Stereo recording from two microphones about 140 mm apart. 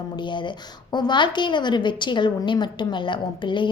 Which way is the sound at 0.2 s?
35° left (ahead or behind).